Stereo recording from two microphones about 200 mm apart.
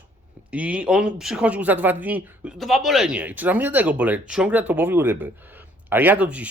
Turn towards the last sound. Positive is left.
turn(degrees=-5)  # may be behind; listen again after turning